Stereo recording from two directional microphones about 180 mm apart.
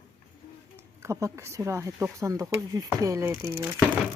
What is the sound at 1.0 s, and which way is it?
Speech, 15° right (ahead or behind).